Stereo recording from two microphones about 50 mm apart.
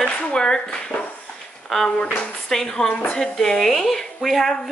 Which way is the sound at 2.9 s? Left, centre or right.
Left.